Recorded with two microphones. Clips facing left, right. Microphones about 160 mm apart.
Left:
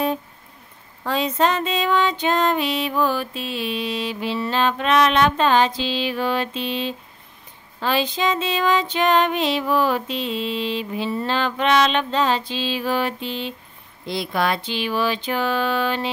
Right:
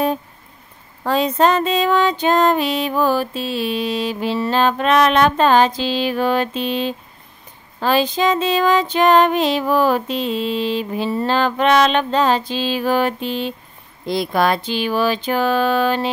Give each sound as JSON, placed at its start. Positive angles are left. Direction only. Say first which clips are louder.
{"t": 1.0, "sound": "music", "louder": "right 4 dB", "side_deg": -40}